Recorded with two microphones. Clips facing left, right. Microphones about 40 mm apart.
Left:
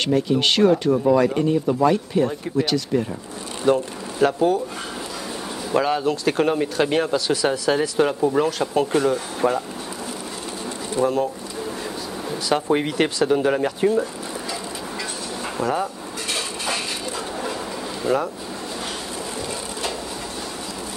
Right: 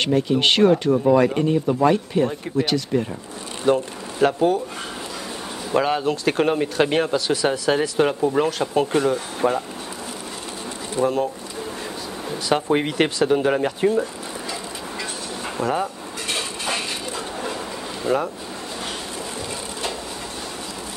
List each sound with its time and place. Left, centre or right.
0.0 s speech: right
5.7 s speech: right
11.0 s speech: right
12.3 s speech: right
14.5 s a sound: right
18.0 s speech: right